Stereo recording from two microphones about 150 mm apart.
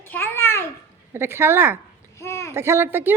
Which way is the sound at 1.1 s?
15° right (ahead or behind).